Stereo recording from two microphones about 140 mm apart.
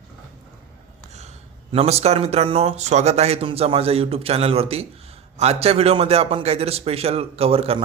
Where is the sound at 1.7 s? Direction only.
45° right (ahead or behind).